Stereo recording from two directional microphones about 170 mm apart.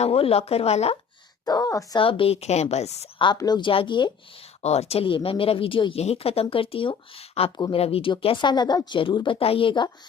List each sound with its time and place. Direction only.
0.0 s speech: 35° left (ahead or behind)
1.5 s speech: 20° left (ahead or behind)
2.0 s speech: 30° left (ahead or behind)
3.3 s speech: 25° left (ahead or behind)
4.6 s speech: 40° left (ahead or behind)
7.5 s speech: 25° left (ahead or behind)
7.8 s speech: 35° left (ahead or behind)